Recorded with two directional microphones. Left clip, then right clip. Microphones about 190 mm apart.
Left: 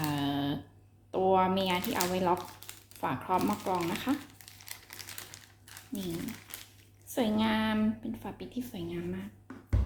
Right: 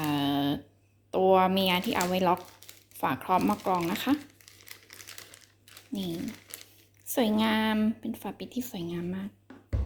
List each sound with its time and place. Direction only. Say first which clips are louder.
0.0 s a sound: right 4 dB; 45° right (ahead or behind)
1.1 s a woman's voice: right 4 dB; 45° right (ahead or behind)
4.4 s crumpling: left 2 dB; centre (ahead or behind)
7.1 s a woman's voice: right 3 dB; 45° right (ahead or behind)